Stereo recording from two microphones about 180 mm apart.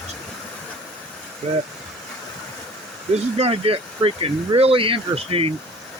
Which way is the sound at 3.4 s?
30° right (ahead or behind).